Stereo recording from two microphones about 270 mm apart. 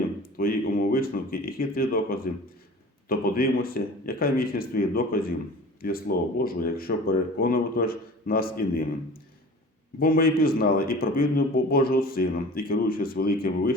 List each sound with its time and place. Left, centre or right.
0.2 s a sound: left
3.1 s a man's voice: left
10.0 s a man's voice: left